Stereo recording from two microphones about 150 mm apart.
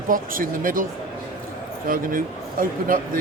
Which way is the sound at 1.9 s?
70° right (ahead or behind).